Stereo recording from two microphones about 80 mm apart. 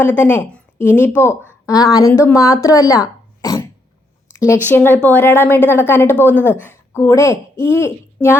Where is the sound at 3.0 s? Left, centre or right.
Left.